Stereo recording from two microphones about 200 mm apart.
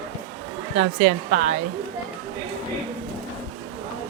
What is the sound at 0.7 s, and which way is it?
Speech, 40° right (ahead or behind).